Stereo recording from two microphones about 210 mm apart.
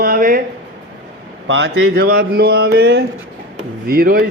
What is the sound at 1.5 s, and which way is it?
Speech, 65° right (ahead or behind).